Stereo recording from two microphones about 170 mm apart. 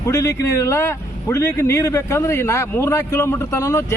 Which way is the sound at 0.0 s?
20° left (ahead or behind).